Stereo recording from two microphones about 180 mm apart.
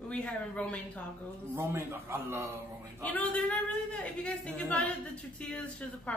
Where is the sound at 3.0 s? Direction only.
10° left (ahead or behind).